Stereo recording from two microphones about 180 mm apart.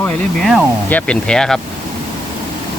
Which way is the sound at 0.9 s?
5° left (ahead or behind).